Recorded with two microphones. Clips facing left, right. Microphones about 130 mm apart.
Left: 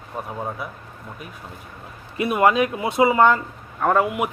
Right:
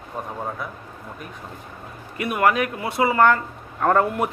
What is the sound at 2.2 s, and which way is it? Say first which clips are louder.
Speech: left 2 dB; 20° left (ahead or behind).